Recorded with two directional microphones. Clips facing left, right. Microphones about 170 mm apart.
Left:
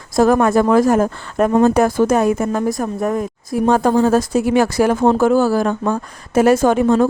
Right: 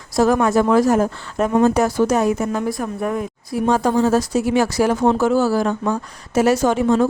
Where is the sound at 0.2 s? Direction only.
50° left (ahead or behind).